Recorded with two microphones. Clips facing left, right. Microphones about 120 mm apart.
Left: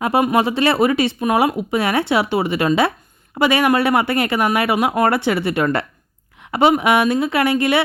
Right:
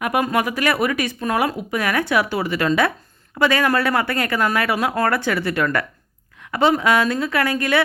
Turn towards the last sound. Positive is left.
turn(degrees=20)  # may be behind; listen again after turning